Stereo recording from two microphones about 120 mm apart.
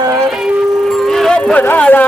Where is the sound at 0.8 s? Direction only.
5° left (ahead or behind).